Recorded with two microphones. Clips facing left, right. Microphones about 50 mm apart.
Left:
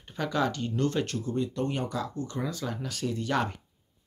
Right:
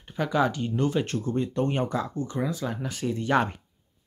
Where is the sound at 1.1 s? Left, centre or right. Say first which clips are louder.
Right 3 dB; right.